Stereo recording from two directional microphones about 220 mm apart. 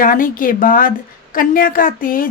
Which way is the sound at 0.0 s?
40° left (ahead or behind).